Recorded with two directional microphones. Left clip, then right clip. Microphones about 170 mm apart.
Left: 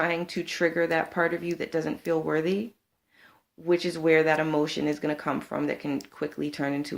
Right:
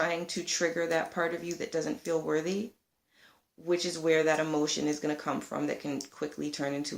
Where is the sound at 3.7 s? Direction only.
45° left (ahead or behind).